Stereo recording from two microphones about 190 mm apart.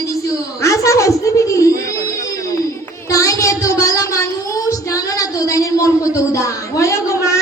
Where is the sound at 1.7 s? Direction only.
50° right (ahead or behind).